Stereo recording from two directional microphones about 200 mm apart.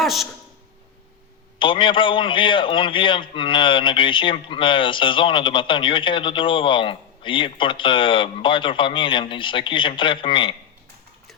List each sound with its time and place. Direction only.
0.0 s speech: centre (ahead or behind)
1.5 s a man's voice: 25° left (ahead or behind)